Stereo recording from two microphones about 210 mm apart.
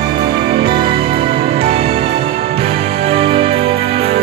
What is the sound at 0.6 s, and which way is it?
Music, 25° right (ahead or behind).